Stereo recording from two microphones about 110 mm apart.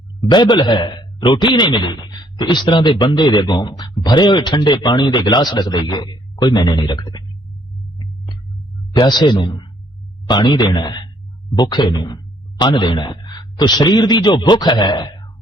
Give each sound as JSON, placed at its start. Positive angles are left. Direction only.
{"t": 0.2, "sound": "a man's voice", "side_deg": 40}
{"t": 8.9, "sound": "a man's voice", "side_deg": 40}